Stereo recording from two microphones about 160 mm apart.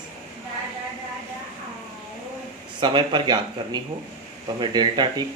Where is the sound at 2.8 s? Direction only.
30° right (ahead or behind).